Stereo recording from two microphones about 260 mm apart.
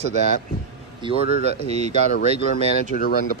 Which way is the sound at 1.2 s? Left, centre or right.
Left.